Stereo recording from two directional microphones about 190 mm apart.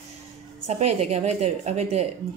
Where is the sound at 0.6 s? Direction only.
35° right (ahead or behind).